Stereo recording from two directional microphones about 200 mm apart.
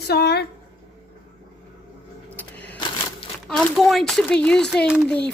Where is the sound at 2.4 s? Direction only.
10° left (ahead or behind).